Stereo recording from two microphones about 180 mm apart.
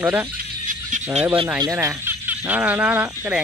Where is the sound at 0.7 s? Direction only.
45° right (ahead or behind).